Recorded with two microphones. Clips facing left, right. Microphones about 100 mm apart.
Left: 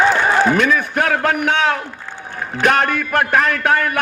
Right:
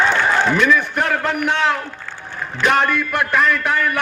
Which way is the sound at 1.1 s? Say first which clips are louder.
Left 3 dB; 60° left (ahead or behind).